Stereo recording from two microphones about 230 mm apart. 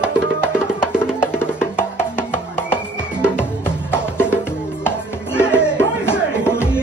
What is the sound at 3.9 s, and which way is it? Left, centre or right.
Music, centre.